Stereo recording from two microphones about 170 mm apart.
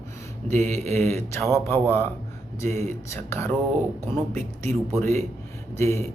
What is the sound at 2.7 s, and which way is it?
Speech, 45° right (ahead or behind).